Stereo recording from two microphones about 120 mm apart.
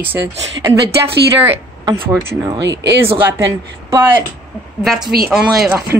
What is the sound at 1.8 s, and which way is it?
Speech, 35° right (ahead or behind).